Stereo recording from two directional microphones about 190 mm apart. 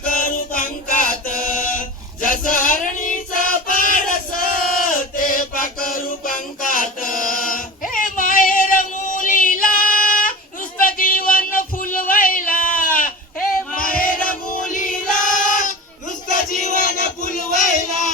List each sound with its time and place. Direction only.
0.0 s music: 45° left (ahead or behind)
2.2 s choir: 45° left (ahead or behind)
7.9 s female singing: 45° left (ahead or behind)
10.8 s a sound: 45° left (ahead or behind)
14.3 s choir: 45° left (ahead or behind)
16.3 s a sound: 45° left (ahead or behind)
17.5 s music: 45° left (ahead or behind)